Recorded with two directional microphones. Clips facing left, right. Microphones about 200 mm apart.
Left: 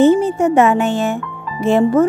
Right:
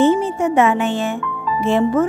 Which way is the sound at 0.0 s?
40° left (ahead or behind).